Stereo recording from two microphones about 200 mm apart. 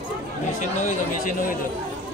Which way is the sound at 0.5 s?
40° left (ahead or behind).